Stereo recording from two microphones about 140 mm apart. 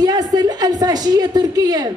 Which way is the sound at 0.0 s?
30° right (ahead or behind).